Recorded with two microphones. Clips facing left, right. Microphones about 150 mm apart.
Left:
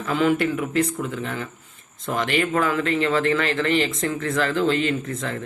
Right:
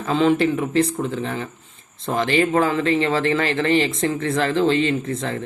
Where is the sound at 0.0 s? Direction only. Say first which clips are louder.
Right 3 dB; 25° right (ahead or behind).